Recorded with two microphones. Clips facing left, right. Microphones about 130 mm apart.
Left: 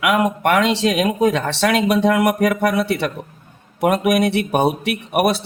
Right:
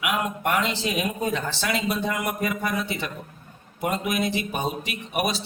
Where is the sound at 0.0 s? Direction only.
75° left (ahead or behind).